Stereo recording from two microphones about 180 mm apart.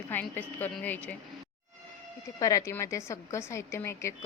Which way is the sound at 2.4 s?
20° left (ahead or behind).